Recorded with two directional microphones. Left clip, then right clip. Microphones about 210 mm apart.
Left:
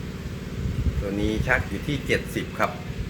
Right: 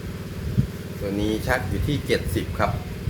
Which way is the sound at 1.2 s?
5° right (ahead or behind).